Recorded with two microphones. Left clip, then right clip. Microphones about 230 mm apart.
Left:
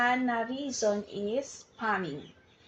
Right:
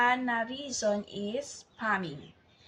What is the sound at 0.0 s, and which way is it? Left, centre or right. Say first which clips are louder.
Speech: right 1 dB; right.